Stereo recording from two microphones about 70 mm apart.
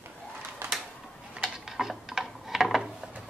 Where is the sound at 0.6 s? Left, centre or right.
Right.